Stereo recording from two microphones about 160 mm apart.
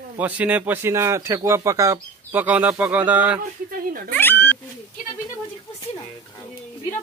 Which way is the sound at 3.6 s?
65° right (ahead or behind).